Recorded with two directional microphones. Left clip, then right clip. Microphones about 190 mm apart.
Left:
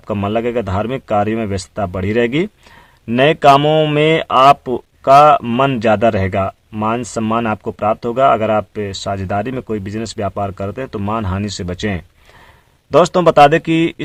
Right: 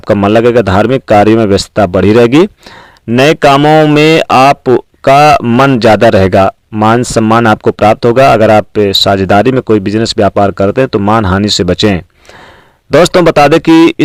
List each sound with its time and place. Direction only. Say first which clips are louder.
0.0 s speech: right 12 dB; 40° right (ahead or behind)
3.6 s speech: right 8 dB; 20° right (ahead or behind)
3.9 s speech: right 7 dB; 40° right (ahead or behind)
5.4 s speech: right 8 dB; 30° right (ahead or behind)